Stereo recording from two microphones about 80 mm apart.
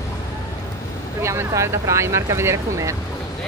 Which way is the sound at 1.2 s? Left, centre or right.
Right.